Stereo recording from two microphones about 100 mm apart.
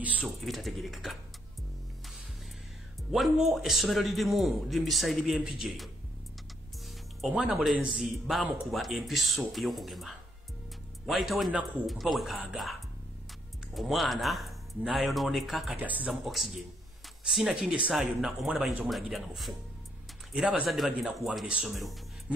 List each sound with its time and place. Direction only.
0.0 s speech: 15° right (ahead or behind)
0.4 s speech: centre (ahead or behind)
3.1 s speech: 5° right (ahead or behind)
7.2 s speech: centre (ahead or behind)
13.7 s speech: centre (ahead or behind)
15.8 s speech: 15° right (ahead or behind)
16.1 s speech: centre (ahead or behind)
21.6 s speech: centre (ahead or behind)